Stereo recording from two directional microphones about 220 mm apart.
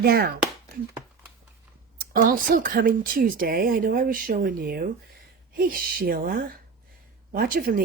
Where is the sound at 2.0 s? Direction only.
40° right (ahead or behind).